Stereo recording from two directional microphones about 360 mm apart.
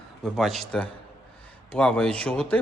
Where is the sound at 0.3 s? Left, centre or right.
Centre.